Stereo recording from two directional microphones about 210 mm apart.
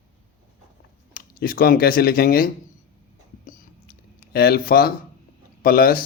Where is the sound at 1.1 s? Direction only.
45° left (ahead or behind).